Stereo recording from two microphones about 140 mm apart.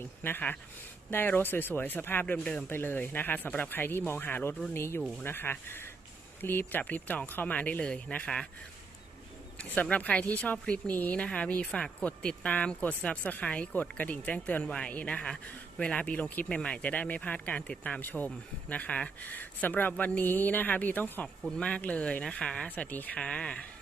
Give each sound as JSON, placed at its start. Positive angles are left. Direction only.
{"t": 0.0, "sound": "speech", "side_deg": 15}
{"t": 9.6, "sound": "speech", "side_deg": 10}